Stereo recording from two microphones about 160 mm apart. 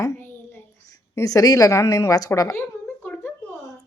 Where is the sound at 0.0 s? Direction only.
20° left (ahead or behind).